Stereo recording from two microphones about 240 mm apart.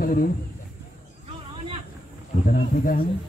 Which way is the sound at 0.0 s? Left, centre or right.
Left.